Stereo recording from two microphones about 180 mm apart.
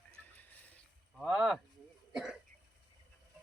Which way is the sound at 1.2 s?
5° right (ahead or behind).